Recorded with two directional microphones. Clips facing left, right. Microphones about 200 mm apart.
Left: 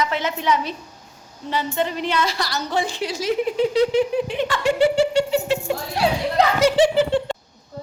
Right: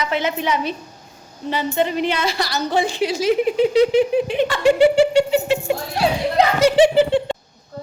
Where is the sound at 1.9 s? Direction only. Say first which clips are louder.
Right 2 dB; 65° right (ahead or behind).